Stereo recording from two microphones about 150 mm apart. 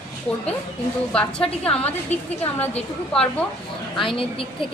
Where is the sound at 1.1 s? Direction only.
5° left (ahead or behind).